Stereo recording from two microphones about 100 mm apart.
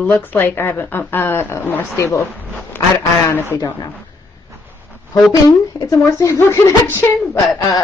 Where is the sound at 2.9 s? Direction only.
25° left (ahead or behind).